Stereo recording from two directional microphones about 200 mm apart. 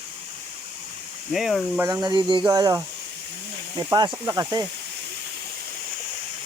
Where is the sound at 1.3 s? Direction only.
Centre (ahead or behind).